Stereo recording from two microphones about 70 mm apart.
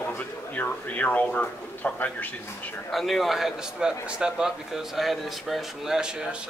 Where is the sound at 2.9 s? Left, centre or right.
Centre.